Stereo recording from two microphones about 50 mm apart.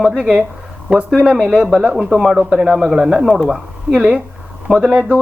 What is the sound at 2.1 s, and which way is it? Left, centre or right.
Speech, centre.